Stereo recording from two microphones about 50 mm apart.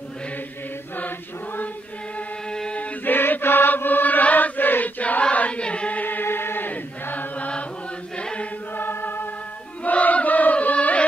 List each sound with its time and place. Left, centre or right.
2.5 s chant: centre
2.8 s chant: left
6.0 s chant: left
6.7 s chant: left
8.7 s choir: left
9.8 s chant: left